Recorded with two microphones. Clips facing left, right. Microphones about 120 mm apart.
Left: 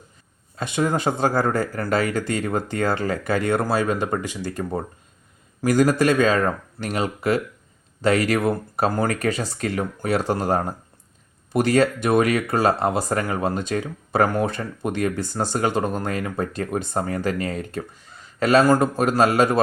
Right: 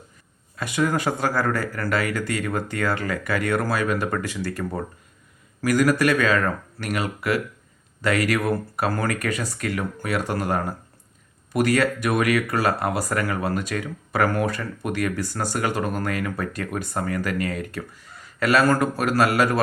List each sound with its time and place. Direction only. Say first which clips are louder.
0.5 s speech: left 1 dB; 25° left (ahead or behind)